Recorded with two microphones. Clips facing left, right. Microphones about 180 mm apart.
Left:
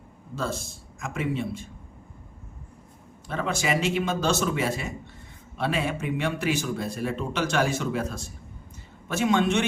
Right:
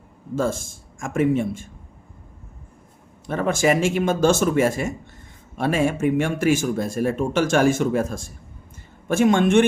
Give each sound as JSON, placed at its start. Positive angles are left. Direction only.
{"t": 0.3, "sound": "speech", "side_deg": -50}
{"t": 3.2, "sound": "speech", "side_deg": -50}